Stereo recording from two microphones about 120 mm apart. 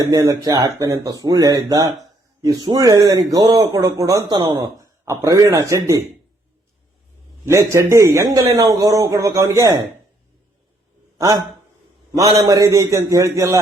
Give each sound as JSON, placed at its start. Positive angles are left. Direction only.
{"t": 0.0, "sound": "a man's voice", "side_deg": -30}
{"t": 5.0, "sound": "a man's voice", "side_deg": -25}
{"t": 7.4, "sound": "a man's voice", "side_deg": -25}
{"t": 11.2, "sound": "a man's voice", "side_deg": -30}